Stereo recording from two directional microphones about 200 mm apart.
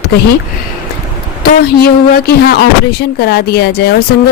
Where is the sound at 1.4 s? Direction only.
50° left (ahead or behind).